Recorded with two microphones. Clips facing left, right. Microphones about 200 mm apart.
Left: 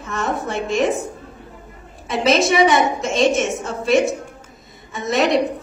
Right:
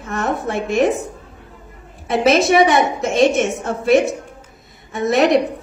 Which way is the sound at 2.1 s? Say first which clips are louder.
Right 3 dB; 55° right (ahead or behind).